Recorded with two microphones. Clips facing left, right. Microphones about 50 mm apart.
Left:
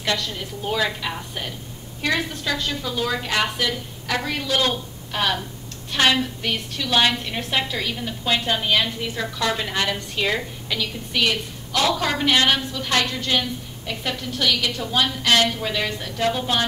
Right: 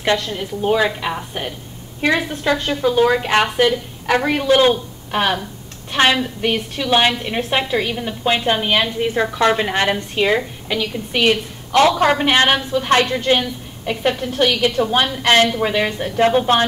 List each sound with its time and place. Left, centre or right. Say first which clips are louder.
0.0 s a woman's voice: right 6 dB; right